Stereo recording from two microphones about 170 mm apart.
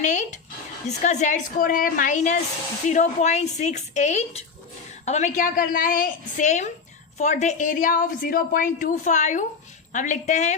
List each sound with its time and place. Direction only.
0.0 s a woman's voice: 45° left (ahead or behind)